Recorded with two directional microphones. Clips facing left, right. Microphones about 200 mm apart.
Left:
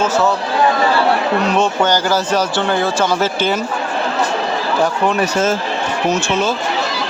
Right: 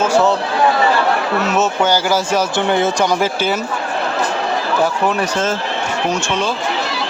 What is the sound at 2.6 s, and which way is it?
Speech, 20° right (ahead or behind).